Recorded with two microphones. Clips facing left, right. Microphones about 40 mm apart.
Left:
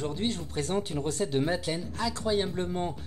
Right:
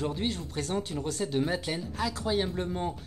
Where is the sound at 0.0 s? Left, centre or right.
Centre.